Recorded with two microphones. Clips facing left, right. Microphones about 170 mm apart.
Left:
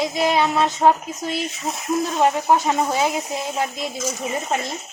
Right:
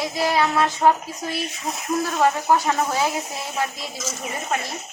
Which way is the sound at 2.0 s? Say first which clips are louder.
Left 1 dB; 20° left (ahead or behind).